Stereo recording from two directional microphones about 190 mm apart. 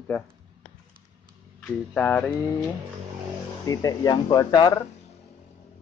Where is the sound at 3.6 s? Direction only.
20° left (ahead or behind).